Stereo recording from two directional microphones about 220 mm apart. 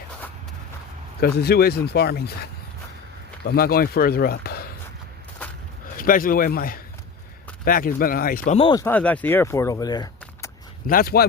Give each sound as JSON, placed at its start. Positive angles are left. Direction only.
{"t": 1.2, "sound": "speech", "side_deg": 45}
{"t": 3.5, "sound": "speech", "side_deg": 45}
{"t": 6.0, "sound": "speech", "side_deg": 40}
{"t": 8.5, "sound": "speech", "side_deg": 25}
{"t": 8.8, "sound": "speech", "side_deg": 5}
{"t": 10.8, "sound": "speech", "side_deg": 40}